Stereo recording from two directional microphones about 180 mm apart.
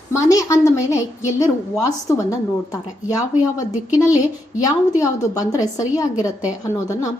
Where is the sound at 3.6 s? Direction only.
20° left (ahead or behind).